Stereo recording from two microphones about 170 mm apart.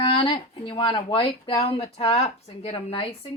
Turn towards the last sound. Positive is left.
turn(degrees=30)  # may be behind; listen again after turning